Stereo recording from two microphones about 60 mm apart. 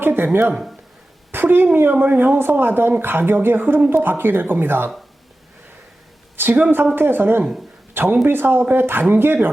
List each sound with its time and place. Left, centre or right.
0.0 s speech: right
1.3 s speech: right
6.3 s a woman's voice: right